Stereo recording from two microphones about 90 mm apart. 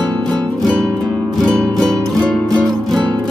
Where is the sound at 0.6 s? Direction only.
Centre (ahead or behind).